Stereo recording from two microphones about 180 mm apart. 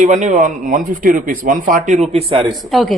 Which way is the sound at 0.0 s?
40° right (ahead or behind).